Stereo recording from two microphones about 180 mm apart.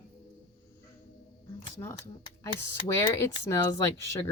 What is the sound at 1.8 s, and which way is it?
Speech, 20° left (ahead or behind).